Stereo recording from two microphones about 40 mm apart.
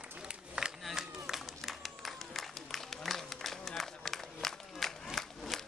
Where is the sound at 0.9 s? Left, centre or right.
Centre.